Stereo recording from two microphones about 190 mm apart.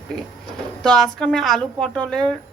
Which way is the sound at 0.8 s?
5° left (ahead or behind).